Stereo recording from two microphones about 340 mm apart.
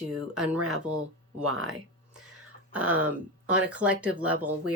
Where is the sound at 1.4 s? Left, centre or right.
Right.